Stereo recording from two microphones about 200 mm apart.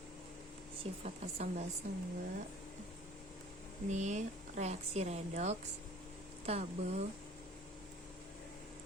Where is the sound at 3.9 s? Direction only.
35° right (ahead or behind).